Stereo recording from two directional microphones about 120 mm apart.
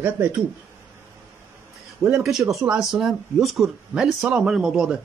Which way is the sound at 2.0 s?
25° right (ahead or behind).